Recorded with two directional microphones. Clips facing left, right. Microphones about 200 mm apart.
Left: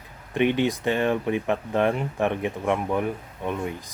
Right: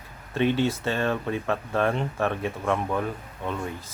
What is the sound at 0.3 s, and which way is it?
Speech, 15° left (ahead or behind).